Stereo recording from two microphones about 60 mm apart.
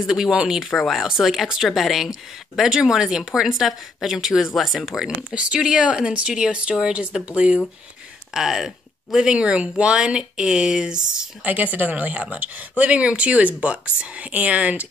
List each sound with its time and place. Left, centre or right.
0.0 s speech: centre
0.7 s speech: centre
5.3 s speech: centre
11.4 s speech: right